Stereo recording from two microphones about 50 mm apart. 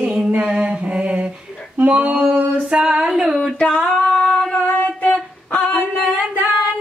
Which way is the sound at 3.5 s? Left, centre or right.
Centre.